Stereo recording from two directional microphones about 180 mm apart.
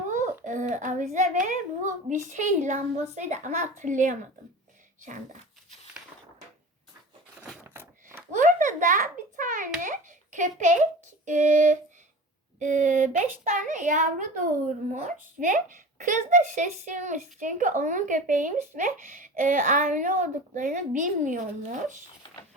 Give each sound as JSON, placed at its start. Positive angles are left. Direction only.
{"t": 0.4, "sound": "a child's voice", "side_deg": -45}
{"t": 7.7, "sound": "chopping", "side_deg": -10}
{"t": 8.3, "sound": "a sound", "side_deg": -45}
{"t": 11.3, "sound": "a child's voice", "side_deg": -45}